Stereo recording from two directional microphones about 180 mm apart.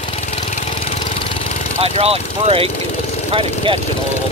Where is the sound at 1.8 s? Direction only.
35° right (ahead or behind).